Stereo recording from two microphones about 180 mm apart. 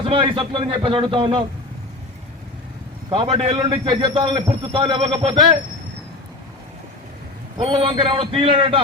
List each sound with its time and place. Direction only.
0.0 s a man's voice: 30° right (ahead or behind)
3.1 s a man's voice: 30° right (ahead or behind)
7.6 s a man's voice: 30° right (ahead or behind)